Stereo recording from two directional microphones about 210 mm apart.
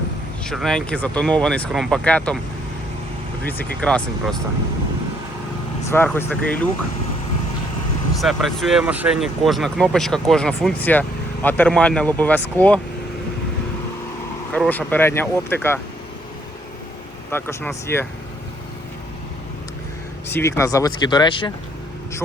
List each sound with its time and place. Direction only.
0.4 s speech: centre (ahead or behind)
3.4 s speech: 5° left (ahead or behind)
5.9 s speech: 10° left (ahead or behind)
8.2 s speech: centre (ahead or behind)
14.5 s speech: 5° left (ahead or behind)
17.3 s speech: 10° left (ahead or behind)
20.3 s speech: 15° left (ahead or behind)